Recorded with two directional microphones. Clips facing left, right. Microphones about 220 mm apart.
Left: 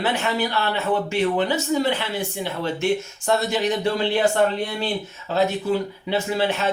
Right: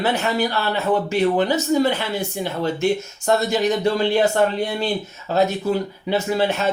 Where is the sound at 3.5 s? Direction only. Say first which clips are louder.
Right 3 dB; 40° right (ahead or behind).